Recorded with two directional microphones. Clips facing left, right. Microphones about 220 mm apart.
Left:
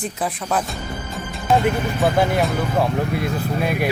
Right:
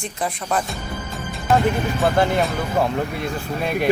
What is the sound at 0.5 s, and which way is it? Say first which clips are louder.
Music: left 1 dB; centre (ahead or behind).